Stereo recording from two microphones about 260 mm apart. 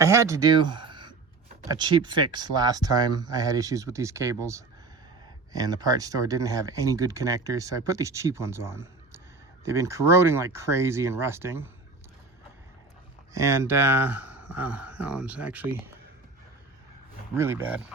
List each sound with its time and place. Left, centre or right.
0.0 s speech: centre
13.3 s speech: centre
17.3 s speech: centre